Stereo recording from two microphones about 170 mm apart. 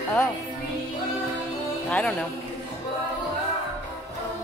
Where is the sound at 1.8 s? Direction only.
5° left (ahead or behind).